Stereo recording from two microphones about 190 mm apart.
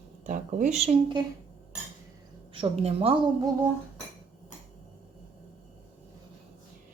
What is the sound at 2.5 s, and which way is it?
Speech, 30° right (ahead or behind).